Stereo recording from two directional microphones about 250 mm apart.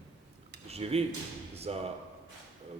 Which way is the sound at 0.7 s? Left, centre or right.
Right.